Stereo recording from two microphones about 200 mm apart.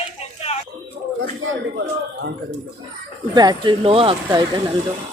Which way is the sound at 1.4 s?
90° right.